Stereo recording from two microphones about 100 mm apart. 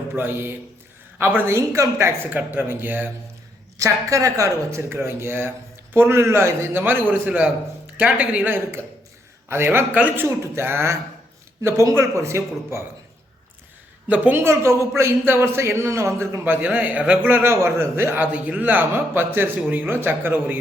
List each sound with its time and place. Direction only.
0.2 s a man's voice: 20° right (ahead or behind)
4.1 s a man's voice: 35° right (ahead or behind); by 10.2 s 15° right (ahead or behind)
10.2 s a man's voice: 30° right (ahead or behind)
14.1 s a man's voice: 20° right (ahead or behind)